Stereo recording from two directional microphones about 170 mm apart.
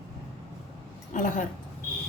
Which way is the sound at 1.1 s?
50° left (ahead or behind).